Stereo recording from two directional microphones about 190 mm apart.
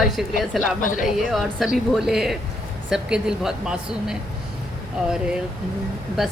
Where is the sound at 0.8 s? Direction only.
45° left (ahead or behind).